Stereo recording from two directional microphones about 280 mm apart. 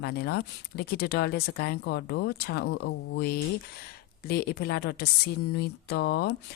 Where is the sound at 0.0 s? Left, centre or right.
Left.